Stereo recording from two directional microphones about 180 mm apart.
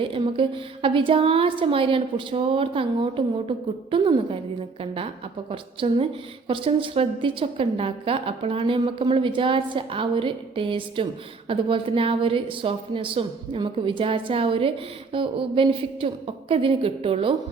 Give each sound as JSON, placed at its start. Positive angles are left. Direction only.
{"t": 0.0, "sound": "a woman's voice", "side_deg": -30}
{"t": 5.5, "sound": "a woman's voice", "side_deg": -30}